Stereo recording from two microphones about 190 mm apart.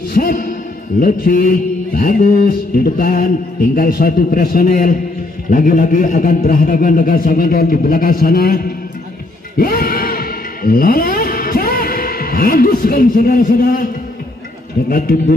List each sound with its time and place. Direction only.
0.1 s a man's voice: 50° left (ahead or behind)
0.9 s mantra: 45° left (ahead or behind)
9.6 s music: 50° left (ahead or behind)
14.9 s mantra: 50° left (ahead or behind)